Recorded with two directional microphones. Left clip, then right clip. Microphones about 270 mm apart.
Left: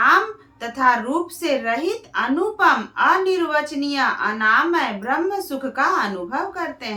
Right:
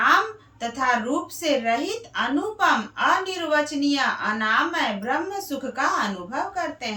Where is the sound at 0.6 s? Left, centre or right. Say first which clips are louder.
Left 5 dB; centre.